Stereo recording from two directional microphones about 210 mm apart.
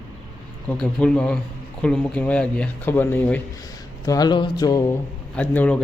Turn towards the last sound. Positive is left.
turn(degrees=10)  # may be behind; listen again after turning